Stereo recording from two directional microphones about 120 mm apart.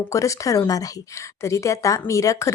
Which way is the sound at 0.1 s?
25° left (ahead or behind).